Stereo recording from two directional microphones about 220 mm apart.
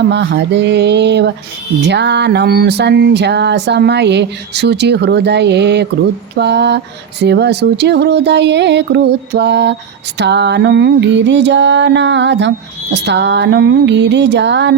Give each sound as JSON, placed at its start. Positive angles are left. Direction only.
{"t": 0.1, "sound": "music", "side_deg": -50}